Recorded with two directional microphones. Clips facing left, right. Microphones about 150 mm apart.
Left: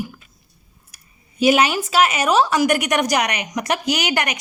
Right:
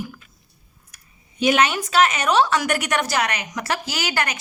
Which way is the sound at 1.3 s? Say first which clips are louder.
Left 3 dB; 10° left (ahead or behind).